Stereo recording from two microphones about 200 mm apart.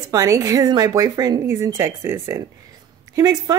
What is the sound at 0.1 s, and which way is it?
Speech, 15° right (ahead or behind).